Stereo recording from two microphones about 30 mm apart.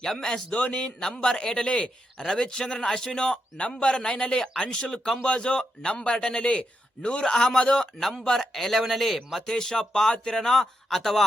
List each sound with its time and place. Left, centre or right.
0.0 s a man's voice: centre
7.9 s a man's voice: centre
9.5 s speech: centre